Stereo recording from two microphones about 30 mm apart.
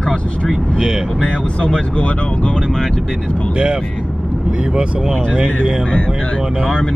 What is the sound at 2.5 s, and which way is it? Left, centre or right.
Speech, centre.